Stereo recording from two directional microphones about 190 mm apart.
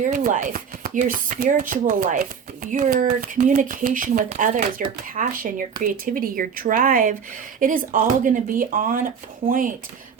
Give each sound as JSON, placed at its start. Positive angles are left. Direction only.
{"t": 0.0, "sound": "speech", "side_deg": -40}